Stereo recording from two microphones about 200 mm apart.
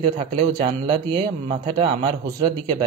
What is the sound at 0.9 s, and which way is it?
Speech, 25° right (ahead or behind).